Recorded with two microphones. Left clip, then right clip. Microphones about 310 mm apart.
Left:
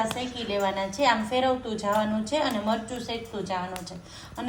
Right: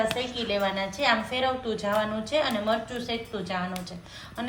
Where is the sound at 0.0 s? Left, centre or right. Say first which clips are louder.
Right 2 dB; left.